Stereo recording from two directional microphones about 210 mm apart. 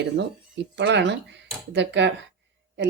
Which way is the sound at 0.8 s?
55° right (ahead or behind).